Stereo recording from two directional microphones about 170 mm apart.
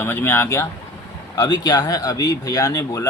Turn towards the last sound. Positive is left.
turn(degrees=20)  # may be behind; listen again after turning